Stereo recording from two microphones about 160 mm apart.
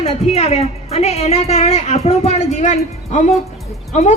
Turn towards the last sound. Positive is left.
turn(degrees=50)  # may be behind; listen again after turning